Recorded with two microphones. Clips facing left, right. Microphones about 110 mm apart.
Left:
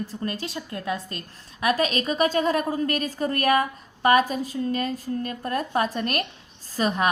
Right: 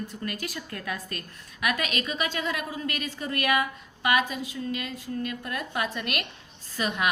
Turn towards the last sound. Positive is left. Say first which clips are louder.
# left 5 dB
turn(degrees=35)  # may be behind; listen again after turning